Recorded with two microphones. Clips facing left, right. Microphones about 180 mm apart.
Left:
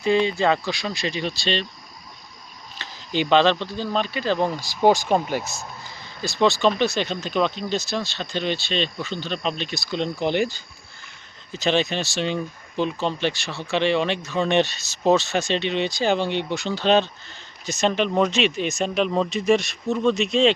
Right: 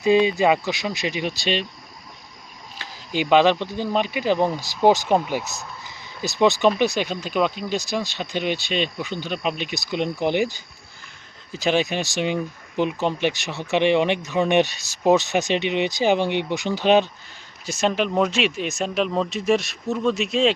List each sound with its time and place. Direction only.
0.0 s speech: 15° right (ahead or behind)
2.7 s speech: 10° right (ahead or behind)